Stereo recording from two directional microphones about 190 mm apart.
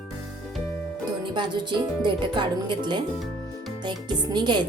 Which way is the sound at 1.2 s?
25° right (ahead or behind).